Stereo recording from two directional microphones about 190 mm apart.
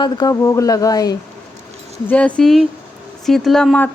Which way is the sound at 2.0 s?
5° left (ahead or behind).